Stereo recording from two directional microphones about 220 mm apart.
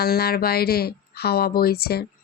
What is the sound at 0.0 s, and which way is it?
Speech, 45° left (ahead or behind).